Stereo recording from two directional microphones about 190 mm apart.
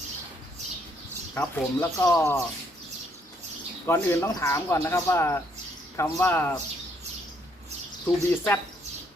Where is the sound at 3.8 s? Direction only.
15° left (ahead or behind).